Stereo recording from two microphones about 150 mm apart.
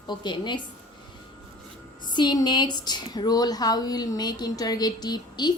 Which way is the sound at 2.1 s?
30° left (ahead or behind).